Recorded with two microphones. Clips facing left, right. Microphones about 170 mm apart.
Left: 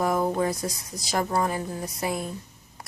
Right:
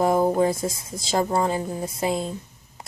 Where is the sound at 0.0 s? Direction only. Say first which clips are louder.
Right 5 dB; 25° right (ahead or behind).